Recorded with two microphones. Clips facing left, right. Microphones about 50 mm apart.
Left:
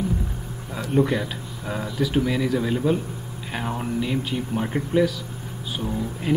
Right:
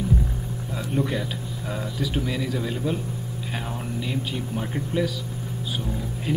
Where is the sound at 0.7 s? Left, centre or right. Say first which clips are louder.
Left 5 dB; centre.